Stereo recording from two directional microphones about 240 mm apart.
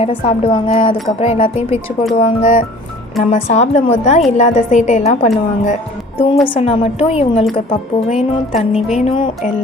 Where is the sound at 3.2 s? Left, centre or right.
Left.